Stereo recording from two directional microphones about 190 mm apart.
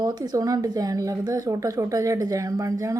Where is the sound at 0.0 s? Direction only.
20° right (ahead or behind).